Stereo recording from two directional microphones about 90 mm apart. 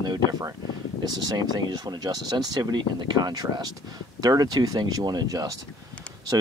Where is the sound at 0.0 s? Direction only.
45° right (ahead or behind).